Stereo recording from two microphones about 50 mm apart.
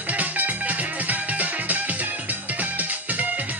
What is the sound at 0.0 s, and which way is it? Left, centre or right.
Music, right.